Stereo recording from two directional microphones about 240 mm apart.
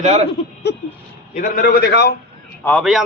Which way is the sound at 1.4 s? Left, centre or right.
Left.